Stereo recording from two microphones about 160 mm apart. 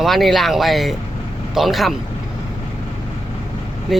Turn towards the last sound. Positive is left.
turn(degrees=0)  # may be behind; listen again after turning